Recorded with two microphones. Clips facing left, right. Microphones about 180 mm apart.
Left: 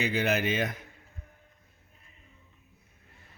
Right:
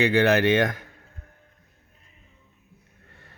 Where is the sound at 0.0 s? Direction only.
80° right.